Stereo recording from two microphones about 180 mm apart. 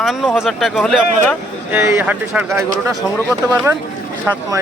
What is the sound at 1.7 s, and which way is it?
Speech, 15° right (ahead or behind).